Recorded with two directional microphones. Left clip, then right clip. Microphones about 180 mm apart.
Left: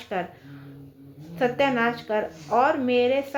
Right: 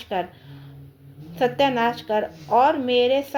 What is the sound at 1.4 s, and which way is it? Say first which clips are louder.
Speech: right 2 dB; 30° right (ahead or behind).